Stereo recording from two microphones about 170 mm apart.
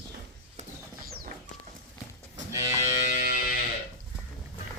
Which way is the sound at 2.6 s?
45° left (ahead or behind).